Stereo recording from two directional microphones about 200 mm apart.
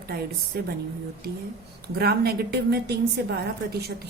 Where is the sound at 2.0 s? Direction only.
50° right (ahead or behind).